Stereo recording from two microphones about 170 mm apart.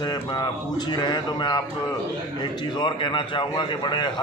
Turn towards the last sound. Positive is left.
turn(degrees=25)  # may be behind; listen again after turning